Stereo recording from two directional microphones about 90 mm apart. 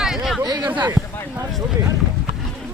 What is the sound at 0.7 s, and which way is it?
Speech, 20° right (ahead or behind).